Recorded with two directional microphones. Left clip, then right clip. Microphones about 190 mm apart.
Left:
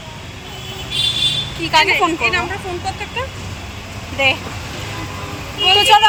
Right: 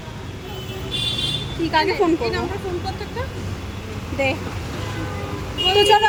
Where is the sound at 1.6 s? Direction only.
15° right (ahead or behind).